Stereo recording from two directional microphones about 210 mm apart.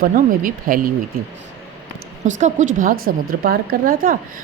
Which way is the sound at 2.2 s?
35° right (ahead or behind).